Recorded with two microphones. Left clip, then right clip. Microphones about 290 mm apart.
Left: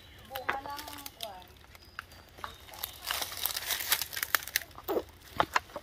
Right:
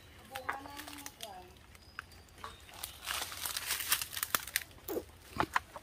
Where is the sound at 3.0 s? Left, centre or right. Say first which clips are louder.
Left 4 dB; left.